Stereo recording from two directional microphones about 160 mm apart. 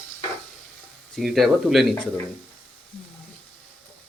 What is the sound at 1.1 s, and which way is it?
Speech, centre (ahead or behind).